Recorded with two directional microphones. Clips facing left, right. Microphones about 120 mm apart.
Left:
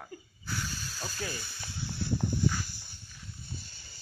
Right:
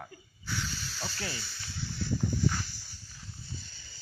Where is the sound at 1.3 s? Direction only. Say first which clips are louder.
Left 1 dB; 50° left (ahead or behind).